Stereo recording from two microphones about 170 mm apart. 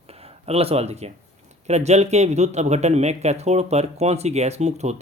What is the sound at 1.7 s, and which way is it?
Speech, 40° right (ahead or behind).